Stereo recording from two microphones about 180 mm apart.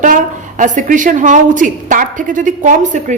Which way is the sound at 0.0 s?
45° right (ahead or behind).